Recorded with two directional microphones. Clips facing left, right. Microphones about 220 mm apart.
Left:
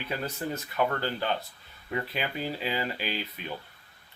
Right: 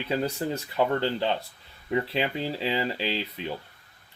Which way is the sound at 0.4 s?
25° right (ahead or behind).